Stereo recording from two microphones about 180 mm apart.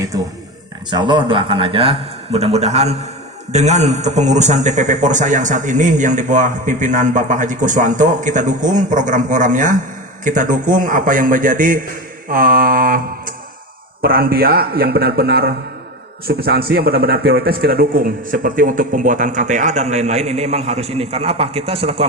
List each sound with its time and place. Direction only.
0.9 s a man's voice: 25° right (ahead or behind)